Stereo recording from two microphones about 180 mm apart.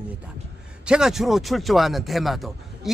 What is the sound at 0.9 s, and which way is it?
Speech, 5° right (ahead or behind).